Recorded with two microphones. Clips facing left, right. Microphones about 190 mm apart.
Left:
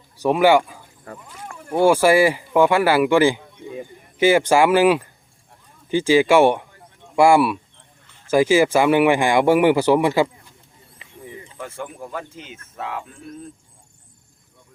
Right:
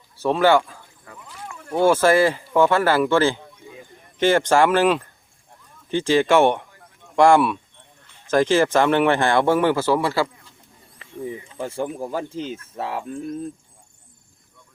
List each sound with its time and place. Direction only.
0.2 s speech: 15° left (ahead or behind)
1.0 s a sound: 40° left (ahead or behind)
1.7 s speech: 10° left (ahead or behind)
11.5 s speech: 30° right (ahead or behind)